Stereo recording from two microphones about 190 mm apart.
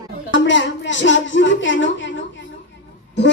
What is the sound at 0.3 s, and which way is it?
A woman's voice, 75° left (ahead or behind).